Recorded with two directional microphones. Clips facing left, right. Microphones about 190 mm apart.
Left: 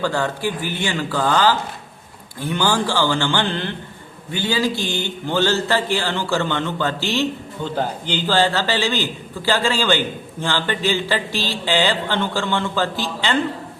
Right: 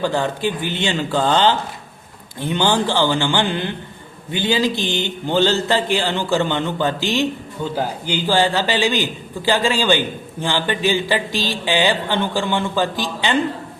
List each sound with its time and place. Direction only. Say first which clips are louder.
0.0 s a man's voice: right 2 dB; 20° right (ahead or behind)